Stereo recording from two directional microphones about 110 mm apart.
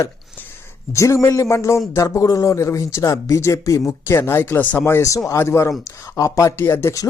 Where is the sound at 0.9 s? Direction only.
30° left (ahead or behind).